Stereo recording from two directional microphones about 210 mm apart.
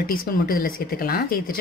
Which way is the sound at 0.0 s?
45° left (ahead or behind).